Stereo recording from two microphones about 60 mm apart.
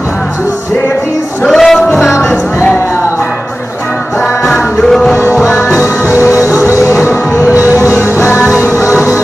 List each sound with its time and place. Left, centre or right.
1.5 s music: centre
4.5 s music: centre
6.1 s music: left
8.5 s music: left